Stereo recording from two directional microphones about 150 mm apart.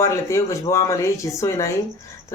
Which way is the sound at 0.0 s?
20° left (ahead or behind).